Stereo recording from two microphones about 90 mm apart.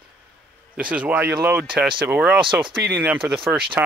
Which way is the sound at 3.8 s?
20° right (ahead or behind).